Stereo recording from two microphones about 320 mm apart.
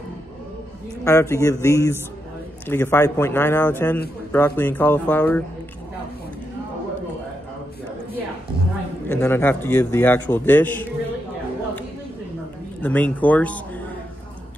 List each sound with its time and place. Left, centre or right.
1.0 s a man's voice: centre
9.1 s a man's voice: centre
12.8 s speech: centre